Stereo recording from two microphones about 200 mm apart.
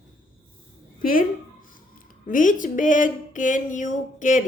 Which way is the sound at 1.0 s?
45° left (ahead or behind).